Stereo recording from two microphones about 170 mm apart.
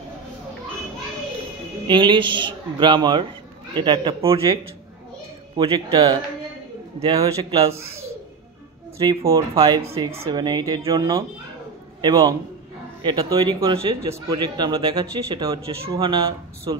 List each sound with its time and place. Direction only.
1.9 s a man's voice: 30° right (ahead or behind)
5.6 s a man's voice: 30° right (ahead or behind)
9.0 s a man's voice: 20° right (ahead or behind)